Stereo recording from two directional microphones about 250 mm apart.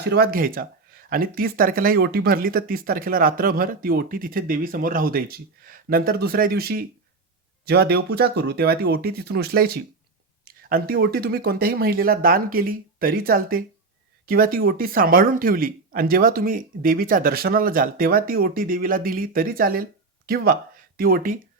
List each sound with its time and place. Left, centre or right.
0.0 s speech: right